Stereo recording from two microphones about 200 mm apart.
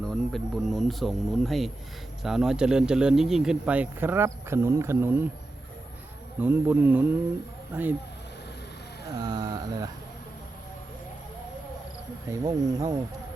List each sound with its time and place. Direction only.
0.0 s speech: centre (ahead or behind)
6.4 s speech: 10° right (ahead or behind)
9.0 s speech: 20° right (ahead or behind)
12.5 s speech: 20° right (ahead or behind)